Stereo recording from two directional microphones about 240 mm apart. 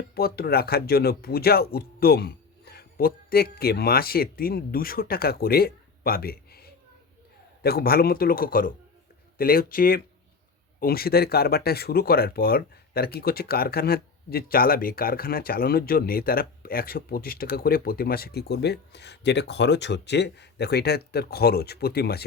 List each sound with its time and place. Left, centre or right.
0.1 s speech: left